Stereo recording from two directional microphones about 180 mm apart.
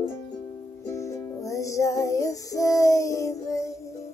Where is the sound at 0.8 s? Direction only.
15° left (ahead or behind).